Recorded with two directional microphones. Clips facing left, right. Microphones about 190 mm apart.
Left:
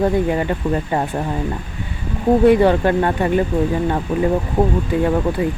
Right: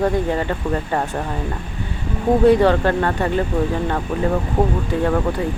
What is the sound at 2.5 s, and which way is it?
Speech, 15° left (ahead or behind).